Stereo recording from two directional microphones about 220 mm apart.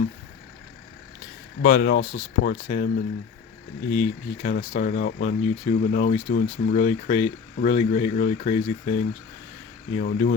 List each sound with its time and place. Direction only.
1.6 s speech: 40° left (ahead or behind)
3.9 s speech: 35° left (ahead or behind)